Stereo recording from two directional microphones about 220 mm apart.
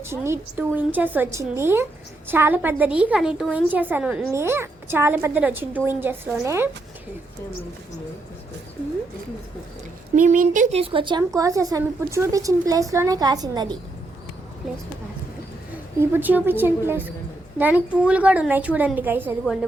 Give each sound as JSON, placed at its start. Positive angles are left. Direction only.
{"t": 0.0, "sound": "a woman's voice", "side_deg": -10}
{"t": 10.2, "sound": "a woman's voice", "side_deg": -35}
{"t": 16.0, "sound": "a woman's voice", "side_deg": -10}